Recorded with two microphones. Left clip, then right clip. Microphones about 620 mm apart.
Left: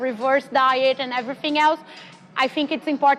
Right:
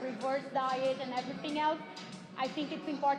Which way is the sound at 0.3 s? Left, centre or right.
Left.